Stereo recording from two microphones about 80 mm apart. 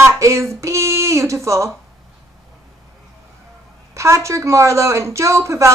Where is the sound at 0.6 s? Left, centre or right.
Right.